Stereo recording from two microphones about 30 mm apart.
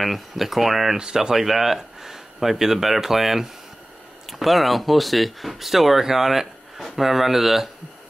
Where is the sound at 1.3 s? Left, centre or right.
Centre.